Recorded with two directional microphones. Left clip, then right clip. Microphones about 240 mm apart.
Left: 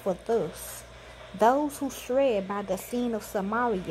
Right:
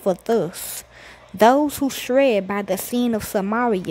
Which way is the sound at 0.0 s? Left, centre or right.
Right.